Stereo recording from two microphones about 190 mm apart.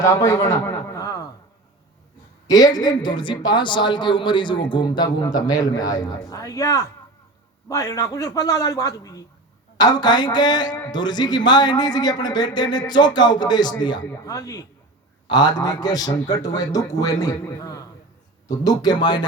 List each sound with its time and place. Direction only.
0.0 s speech: 15° left (ahead or behind)
2.5 s speech: 20° left (ahead or behind)